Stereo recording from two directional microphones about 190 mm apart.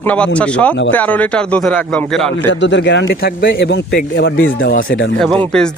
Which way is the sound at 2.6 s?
70° left (ahead or behind).